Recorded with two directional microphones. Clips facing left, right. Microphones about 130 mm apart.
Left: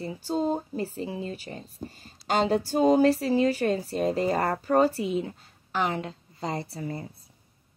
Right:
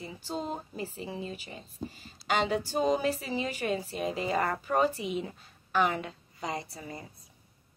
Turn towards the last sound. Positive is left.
turn(degrees=30)  # may be behind; listen again after turning